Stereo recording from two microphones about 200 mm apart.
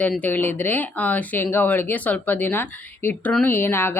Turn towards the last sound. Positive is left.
turn(degrees=10)  # may be behind; listen again after turning